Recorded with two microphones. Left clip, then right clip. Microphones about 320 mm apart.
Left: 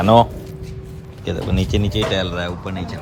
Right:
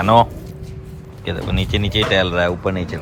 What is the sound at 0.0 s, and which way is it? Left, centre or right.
Speech, centre.